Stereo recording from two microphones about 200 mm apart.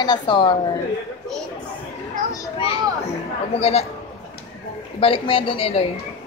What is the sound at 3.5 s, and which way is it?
Speech, 30° left (ahead or behind).